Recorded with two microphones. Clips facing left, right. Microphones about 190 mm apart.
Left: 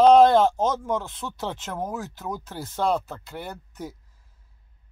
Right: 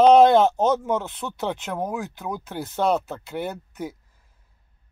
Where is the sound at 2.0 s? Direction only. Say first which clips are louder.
Right 2 dB; centre (ahead or behind).